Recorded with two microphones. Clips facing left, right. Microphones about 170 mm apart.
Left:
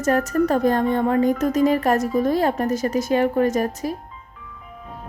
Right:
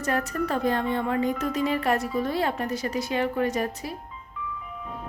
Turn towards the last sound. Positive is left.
turn(degrees=45)  # may be behind; listen again after turning